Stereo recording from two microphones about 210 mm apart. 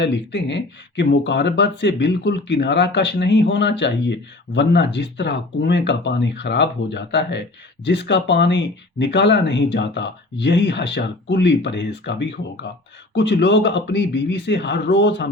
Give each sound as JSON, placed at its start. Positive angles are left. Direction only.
{"t": 0.0, "sound": "speech", "side_deg": 55}